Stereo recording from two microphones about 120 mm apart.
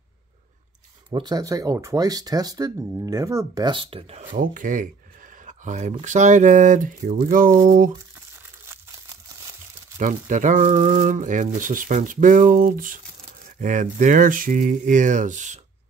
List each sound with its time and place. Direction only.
1.1 s speech: 35° right (ahead or behind); by 4.3 s 55° right (ahead or behind)
4.6 s speech: 90° right
9.9 s speech: 90° right